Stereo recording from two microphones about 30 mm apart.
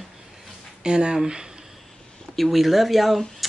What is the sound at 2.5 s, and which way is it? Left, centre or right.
Speech, centre.